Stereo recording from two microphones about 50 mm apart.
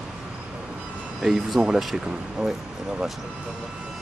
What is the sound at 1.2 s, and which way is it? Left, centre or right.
Speech, centre.